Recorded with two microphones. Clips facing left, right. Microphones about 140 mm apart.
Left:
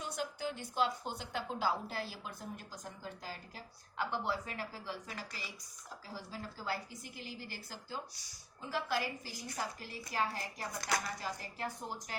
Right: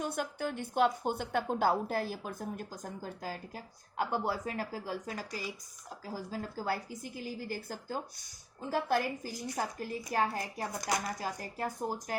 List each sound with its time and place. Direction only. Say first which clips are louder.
0.0 s a woman's voice: right 5 dB; 55° right (ahead or behind)